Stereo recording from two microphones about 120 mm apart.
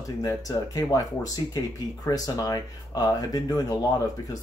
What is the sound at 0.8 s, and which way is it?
Speech, 30° left (ahead or behind).